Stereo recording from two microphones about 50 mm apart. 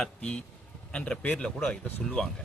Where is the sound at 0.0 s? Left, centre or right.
Centre.